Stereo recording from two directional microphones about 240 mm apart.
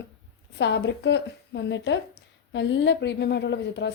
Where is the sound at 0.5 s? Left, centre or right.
Left.